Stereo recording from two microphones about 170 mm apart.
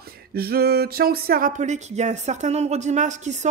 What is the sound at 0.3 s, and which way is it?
Speech, 65° right (ahead or behind).